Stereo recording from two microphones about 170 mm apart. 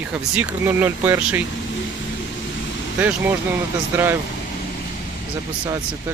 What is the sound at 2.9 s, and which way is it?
Speech, 10° right (ahead or behind).